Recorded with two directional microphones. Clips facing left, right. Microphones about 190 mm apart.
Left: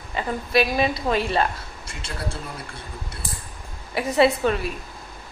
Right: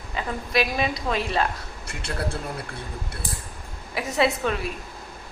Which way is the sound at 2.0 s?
60° right (ahead or behind).